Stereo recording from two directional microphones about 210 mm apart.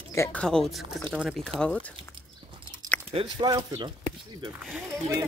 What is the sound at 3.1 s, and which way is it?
Speech, 25° right (ahead or behind).